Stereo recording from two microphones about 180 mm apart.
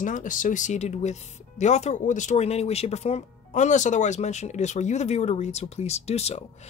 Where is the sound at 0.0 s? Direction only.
45° left (ahead or behind).